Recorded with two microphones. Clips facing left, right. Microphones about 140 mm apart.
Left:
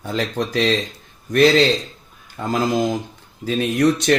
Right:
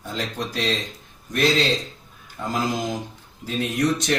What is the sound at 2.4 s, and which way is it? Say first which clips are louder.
Speech: left 6 dB; 60° left (ahead or behind).